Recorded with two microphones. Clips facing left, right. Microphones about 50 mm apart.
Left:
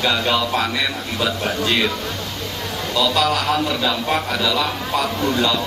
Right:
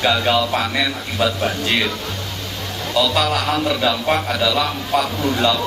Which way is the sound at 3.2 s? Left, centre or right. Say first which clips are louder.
Even; centre.